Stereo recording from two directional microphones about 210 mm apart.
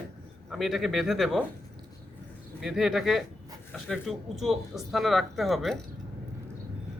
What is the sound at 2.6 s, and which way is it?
Speech, centre (ahead or behind).